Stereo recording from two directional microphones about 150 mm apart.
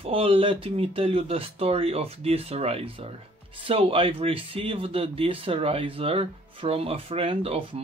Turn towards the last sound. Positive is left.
turn(degrees=-40)  # may be behind; listen again after turning